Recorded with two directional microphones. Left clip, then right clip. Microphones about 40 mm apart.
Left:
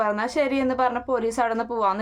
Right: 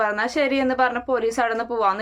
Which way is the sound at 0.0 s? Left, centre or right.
Left.